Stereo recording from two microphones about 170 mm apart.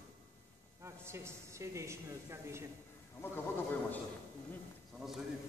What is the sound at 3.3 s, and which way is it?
Speech, 10° left (ahead or behind).